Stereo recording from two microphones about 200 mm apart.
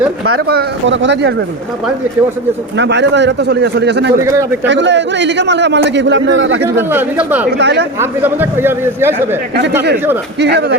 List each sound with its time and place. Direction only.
0.4 s a man's voice: 60° right (ahead or behind)
2.7 s a man's voice: 60° right (ahead or behind)
4.2 s a man's voice: 15° right (ahead or behind)
4.6 s a man's voice: 60° right (ahead or behind)
6.6 s a man's voice: 10° right (ahead or behind)
7.4 s a man's voice: 55° right (ahead or behind)
8.2 s a man's voice: 10° right (ahead or behind)
10.4 s a man's voice: 55° right (ahead or behind)